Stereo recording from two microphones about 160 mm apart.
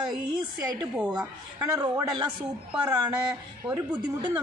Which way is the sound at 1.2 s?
25° right (ahead or behind).